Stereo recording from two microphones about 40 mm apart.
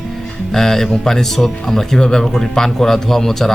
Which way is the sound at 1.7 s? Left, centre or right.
Centre.